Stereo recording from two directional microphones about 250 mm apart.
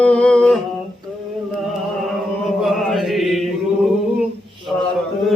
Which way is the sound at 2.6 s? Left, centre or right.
Centre.